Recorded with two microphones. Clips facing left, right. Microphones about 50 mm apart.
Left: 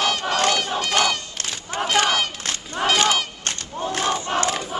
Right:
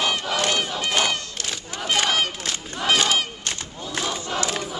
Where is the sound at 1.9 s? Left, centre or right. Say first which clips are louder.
Left 1 dB; centre.